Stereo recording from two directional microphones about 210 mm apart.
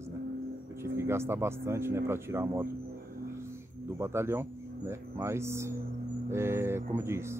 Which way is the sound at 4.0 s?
10° right (ahead or behind).